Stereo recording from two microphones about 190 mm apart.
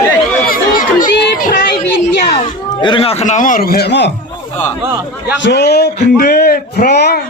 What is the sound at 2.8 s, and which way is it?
A man's voice, 30° left (ahead or behind).